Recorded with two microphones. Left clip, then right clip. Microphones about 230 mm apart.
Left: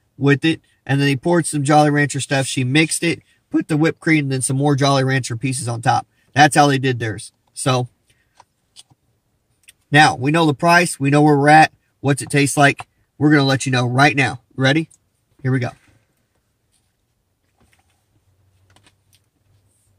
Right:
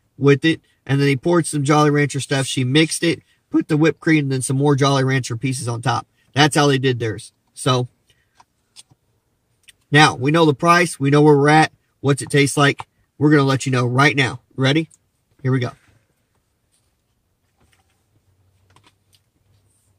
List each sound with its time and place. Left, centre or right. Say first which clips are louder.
0.2 s speech: right 1 dB; centre
9.8 s speech: left 1 dB; centre